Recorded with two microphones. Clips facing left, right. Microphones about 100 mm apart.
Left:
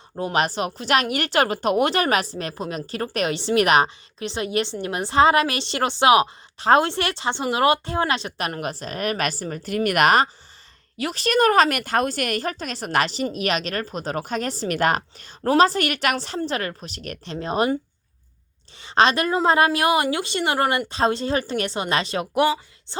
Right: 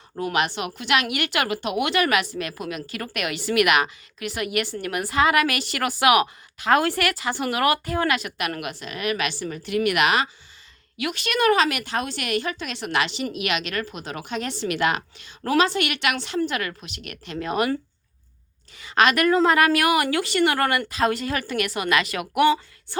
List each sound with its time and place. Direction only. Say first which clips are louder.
0.2 s a woman's voice: left 2 dB; 35° left (ahead or behind)
18.8 s a woman's voice: left 1 dB; 30° left (ahead or behind)